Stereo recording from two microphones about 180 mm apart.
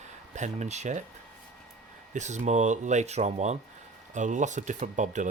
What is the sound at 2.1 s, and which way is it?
Speech, 40° right (ahead or behind).